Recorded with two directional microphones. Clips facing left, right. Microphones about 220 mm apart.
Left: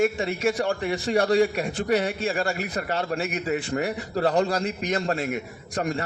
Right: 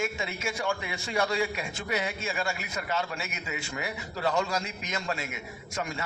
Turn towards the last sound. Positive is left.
turn(degrees=35)  # may be behind; listen again after turning